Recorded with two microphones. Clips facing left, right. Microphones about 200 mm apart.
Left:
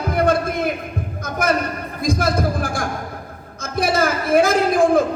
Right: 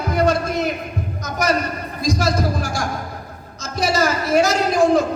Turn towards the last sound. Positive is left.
turn(degrees=55)  # may be behind; listen again after turning